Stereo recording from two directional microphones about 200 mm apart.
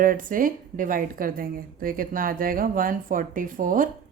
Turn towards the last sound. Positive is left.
turn(degrees=-45)  # may be behind; listen again after turning